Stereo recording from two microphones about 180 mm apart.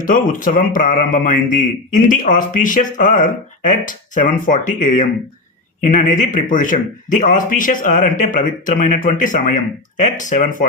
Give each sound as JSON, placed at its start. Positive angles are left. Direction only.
{"t": 0.0, "sound": "speech", "side_deg": 45}